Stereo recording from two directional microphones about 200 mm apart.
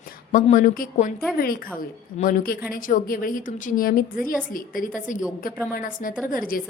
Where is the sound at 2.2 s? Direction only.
45° left (ahead or behind).